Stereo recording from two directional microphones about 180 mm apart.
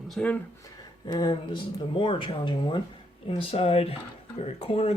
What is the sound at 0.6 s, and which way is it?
Speech, 20° left (ahead or behind).